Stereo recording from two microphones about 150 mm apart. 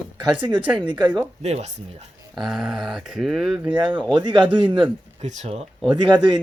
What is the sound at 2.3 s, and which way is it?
Speech, centre (ahead or behind).